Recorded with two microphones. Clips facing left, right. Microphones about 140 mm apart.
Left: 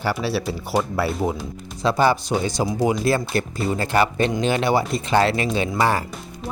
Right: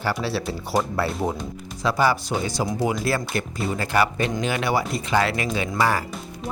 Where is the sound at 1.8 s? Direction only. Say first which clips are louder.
Left 3 dB; 25° left (ahead or behind).